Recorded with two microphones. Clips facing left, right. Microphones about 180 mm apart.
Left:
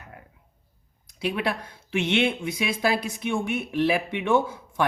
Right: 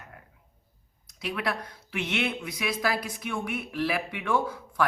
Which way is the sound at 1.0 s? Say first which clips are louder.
Left 4 dB; 25° left (ahead or behind).